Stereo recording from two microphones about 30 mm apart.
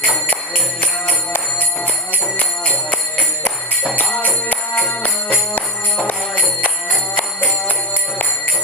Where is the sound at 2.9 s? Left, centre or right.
Left.